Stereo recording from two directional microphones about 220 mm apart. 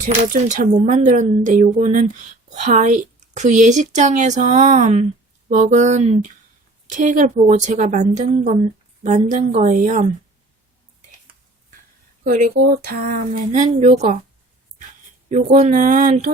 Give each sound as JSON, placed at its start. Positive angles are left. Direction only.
{"t": 0.0, "sound": "speech", "side_deg": -35}
{"t": 12.2, "sound": "speech", "side_deg": -40}
{"t": 15.5, "sound": "speech", "side_deg": -35}